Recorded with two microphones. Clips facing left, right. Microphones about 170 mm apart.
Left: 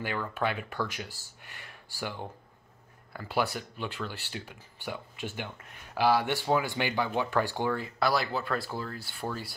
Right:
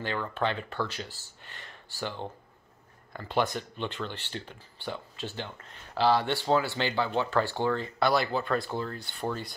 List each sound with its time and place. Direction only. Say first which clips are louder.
0.0 s speech: right 1 dB; 10° left (ahead or behind)